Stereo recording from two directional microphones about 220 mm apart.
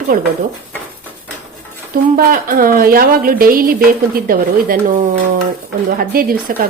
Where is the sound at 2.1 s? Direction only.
40° right (ahead or behind).